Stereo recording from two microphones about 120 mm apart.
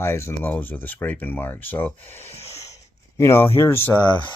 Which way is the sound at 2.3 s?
60° left (ahead or behind).